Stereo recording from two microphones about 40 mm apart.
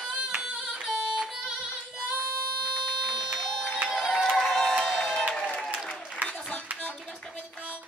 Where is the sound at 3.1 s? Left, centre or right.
Centre.